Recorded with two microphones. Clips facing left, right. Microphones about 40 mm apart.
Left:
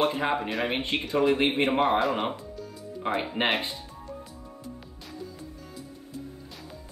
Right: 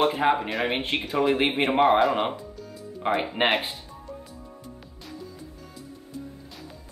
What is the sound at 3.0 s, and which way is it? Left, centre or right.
Speech, right.